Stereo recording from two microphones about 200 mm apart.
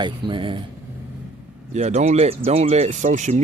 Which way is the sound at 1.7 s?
35° right (ahead or behind).